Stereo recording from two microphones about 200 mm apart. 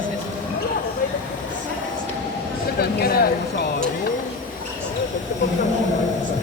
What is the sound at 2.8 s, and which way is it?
Speech, 50° left (ahead or behind).